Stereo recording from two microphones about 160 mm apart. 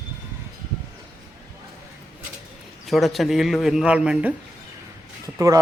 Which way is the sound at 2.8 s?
Centre (ahead or behind).